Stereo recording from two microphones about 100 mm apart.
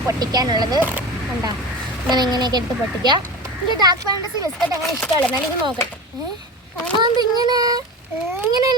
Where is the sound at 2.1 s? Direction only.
45° right (ahead or behind).